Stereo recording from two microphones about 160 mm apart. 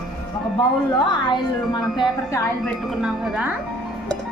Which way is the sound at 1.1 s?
25° left (ahead or behind).